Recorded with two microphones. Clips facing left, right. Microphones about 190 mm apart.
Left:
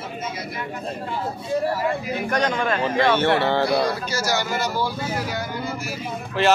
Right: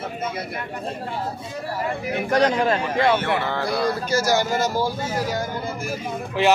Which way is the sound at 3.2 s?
30° left (ahead or behind).